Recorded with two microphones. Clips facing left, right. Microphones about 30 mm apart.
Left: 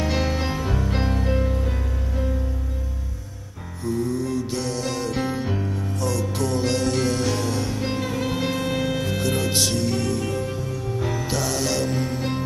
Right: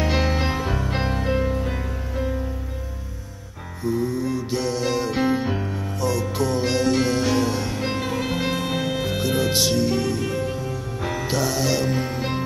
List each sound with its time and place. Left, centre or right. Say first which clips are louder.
0.0 s music: right 2 dB; centre
3.8 s music: right 1 dB; centre